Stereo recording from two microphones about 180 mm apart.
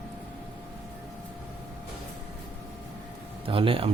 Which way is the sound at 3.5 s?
30° right (ahead or behind).